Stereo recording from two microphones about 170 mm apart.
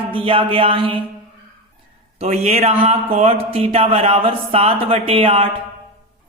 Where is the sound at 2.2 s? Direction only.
40° right (ahead or behind).